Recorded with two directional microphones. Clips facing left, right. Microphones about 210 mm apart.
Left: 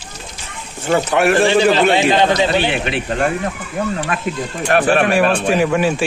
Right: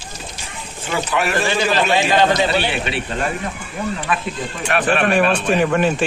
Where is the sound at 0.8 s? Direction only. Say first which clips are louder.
Left 7 dB; 55° left (ahead or behind).